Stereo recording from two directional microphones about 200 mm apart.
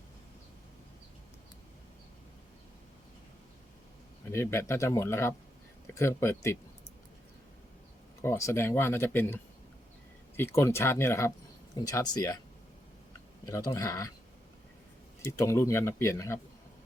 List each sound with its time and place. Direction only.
4.3 s speech: 15° left (ahead or behind)
8.2 s speech: 15° left (ahead or behind)
13.4 s speech: 15° left (ahead or behind)
15.3 s speech: 15° left (ahead or behind)